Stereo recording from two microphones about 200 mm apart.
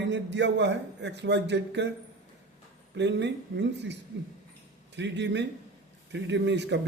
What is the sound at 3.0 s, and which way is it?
A man's voice, 60° right (ahead or behind).